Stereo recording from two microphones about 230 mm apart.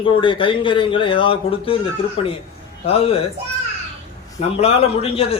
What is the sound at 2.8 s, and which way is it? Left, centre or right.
Speech, left.